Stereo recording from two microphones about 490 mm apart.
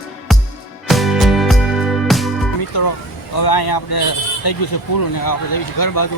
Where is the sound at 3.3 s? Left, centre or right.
Left.